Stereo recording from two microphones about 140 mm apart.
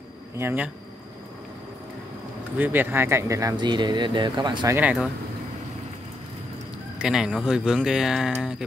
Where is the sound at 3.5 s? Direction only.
35° right (ahead or behind).